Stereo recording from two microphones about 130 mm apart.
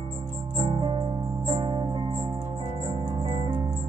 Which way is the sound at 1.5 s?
40° right (ahead or behind).